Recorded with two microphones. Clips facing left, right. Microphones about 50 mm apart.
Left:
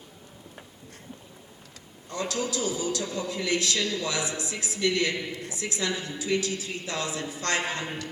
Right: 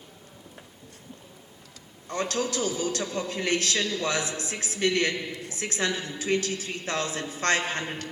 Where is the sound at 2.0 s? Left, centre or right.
Right.